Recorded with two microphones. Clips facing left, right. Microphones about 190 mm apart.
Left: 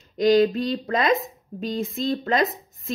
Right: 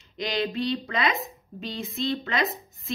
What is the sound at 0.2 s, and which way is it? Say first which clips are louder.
A woman's voice: left 10 dB; 45° left (ahead or behind).